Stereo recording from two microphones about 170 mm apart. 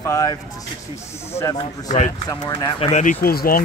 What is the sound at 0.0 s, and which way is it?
Speech, 20° left (ahead or behind).